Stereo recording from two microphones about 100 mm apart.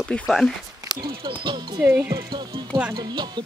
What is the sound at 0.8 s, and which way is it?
Speech, 45° right (ahead or behind).